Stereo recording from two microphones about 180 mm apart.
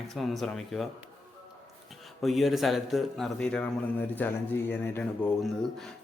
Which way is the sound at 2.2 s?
Centre (ahead or behind).